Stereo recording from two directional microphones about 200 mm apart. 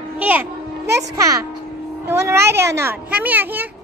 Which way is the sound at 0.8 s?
55° right (ahead or behind).